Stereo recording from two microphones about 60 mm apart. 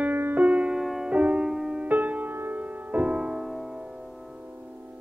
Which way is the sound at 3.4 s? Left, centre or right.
Centre.